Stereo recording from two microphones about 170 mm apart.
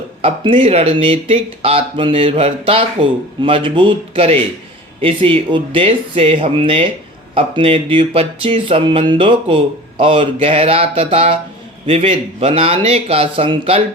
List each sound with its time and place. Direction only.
0.2 s speech: 30° right (ahead or behind)